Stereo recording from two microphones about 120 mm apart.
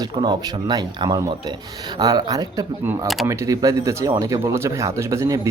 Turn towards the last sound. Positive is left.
turn(degrees=-25)  # may be behind; listen again after turning